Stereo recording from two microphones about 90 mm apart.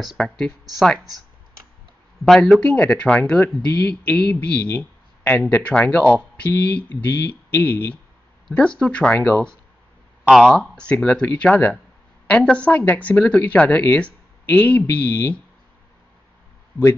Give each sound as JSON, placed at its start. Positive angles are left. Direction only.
{"t": 0.0, "sound": "speech", "side_deg": 0}
{"t": 2.2, "sound": "speech", "side_deg": 5}
{"t": 8.5, "sound": "speech", "side_deg": 10}
{"t": 10.2, "sound": "speech", "side_deg": 0}
{"t": 10.9, "sound": "speech", "side_deg": 15}